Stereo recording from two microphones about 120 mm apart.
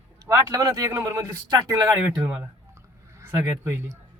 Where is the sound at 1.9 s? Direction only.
10° right (ahead or behind).